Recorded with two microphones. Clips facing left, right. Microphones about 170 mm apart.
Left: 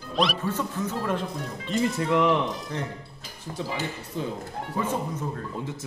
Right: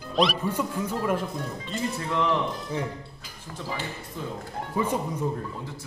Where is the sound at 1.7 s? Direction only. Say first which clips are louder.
Left 7 dB; 15° left (ahead or behind).